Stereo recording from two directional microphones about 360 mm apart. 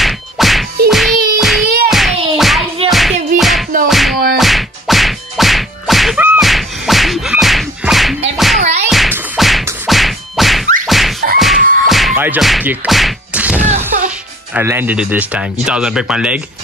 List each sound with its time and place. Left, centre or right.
0.0 s whack: centre
0.8 s music: centre
4.4 s whack: centre
8.5 s music: centre
8.9 s whack: centre
10.9 s a sound: centre
11.3 s music: centre
13.9 s music: right
14.5 s speech: centre